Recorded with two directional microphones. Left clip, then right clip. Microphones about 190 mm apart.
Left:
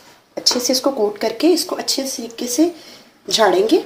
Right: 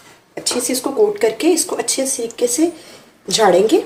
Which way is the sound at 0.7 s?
20° left (ahead or behind).